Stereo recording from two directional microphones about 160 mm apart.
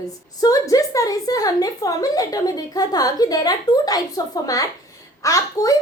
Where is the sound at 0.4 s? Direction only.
20° left (ahead or behind).